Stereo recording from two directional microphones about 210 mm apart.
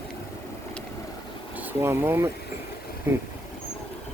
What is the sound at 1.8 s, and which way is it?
Speech, 10° right (ahead or behind).